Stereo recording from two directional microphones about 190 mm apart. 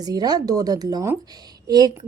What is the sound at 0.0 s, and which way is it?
A woman's voice, 20° right (ahead or behind).